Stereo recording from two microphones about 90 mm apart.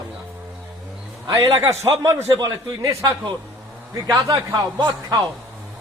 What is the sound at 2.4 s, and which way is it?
Speech, 45° right (ahead or behind).